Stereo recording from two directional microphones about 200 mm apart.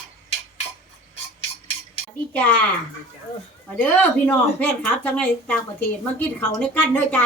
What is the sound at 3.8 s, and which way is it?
A woman's voice, 5° left (ahead or behind).